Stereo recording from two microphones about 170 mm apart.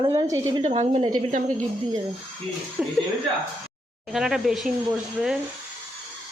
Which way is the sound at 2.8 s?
10° right (ahead or behind).